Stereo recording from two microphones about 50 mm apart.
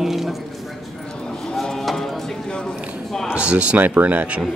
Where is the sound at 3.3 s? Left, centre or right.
Right.